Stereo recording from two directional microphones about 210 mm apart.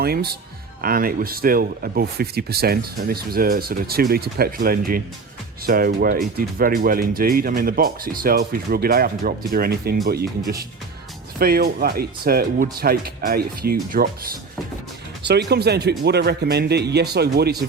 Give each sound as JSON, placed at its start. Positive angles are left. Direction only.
{"t": 0.0, "sound": "speech", "side_deg": -45}
{"t": 11.3, "sound": "speech", "side_deg": -45}
{"t": 15.3, "sound": "speech", "side_deg": -50}